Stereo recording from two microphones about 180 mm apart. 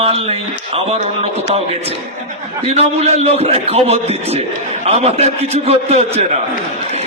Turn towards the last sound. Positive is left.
turn(degrees=-35)  # may be behind; listen again after turning